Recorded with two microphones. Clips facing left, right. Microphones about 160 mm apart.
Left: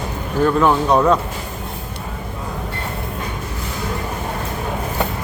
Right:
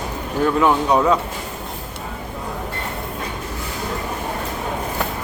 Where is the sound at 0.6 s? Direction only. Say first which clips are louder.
Left 1 dB; 5° right (ahead or behind).